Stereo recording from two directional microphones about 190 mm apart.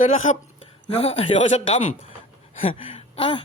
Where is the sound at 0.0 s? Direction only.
40° left (ahead or behind).